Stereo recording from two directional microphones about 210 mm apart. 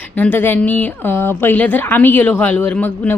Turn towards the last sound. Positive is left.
turn(degrees=5)  # may be behind; listen again after turning